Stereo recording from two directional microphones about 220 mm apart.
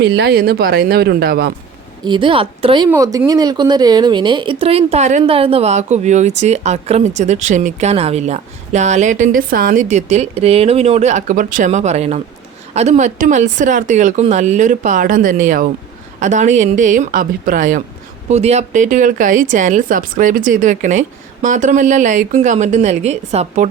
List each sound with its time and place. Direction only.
0.0 s speech: 50° right (ahead or behind)
2.0 s speech: 20° right (ahead or behind)